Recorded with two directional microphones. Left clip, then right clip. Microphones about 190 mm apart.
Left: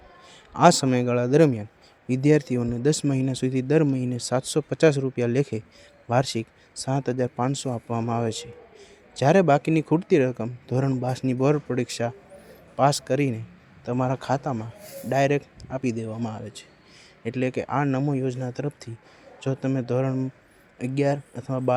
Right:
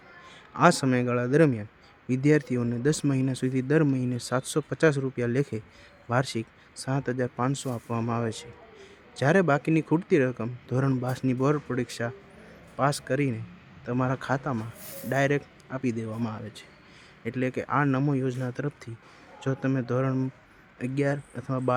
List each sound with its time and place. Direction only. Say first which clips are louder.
0.3 s a man's voice: left 4 dB; 20° left (ahead or behind)
17.8 s speech: left 1 dB; 5° left (ahead or behind)
20.7 s speech: left 4 dB; 15° left (ahead or behind)